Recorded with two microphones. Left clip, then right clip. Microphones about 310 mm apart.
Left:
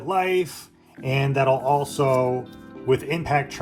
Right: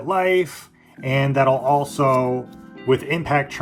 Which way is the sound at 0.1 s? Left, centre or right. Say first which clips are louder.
Right 3 dB; right.